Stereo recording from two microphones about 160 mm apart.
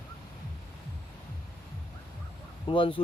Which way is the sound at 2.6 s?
35° left (ahead or behind).